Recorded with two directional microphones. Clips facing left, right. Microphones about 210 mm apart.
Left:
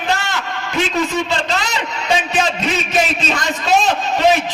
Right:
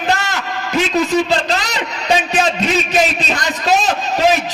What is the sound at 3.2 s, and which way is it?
Speech, 40° right (ahead or behind).